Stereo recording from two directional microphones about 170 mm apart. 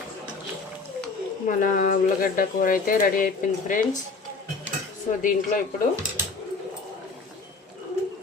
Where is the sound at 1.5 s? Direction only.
50° left (ahead or behind).